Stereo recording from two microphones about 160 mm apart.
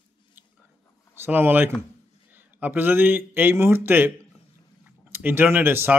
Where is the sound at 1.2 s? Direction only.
15° right (ahead or behind).